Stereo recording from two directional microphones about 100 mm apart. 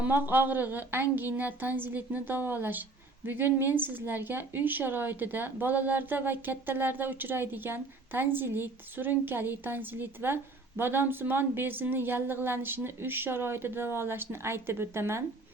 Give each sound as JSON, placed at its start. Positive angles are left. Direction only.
{"t": 0.0, "sound": "a woman's voice", "side_deg": -20}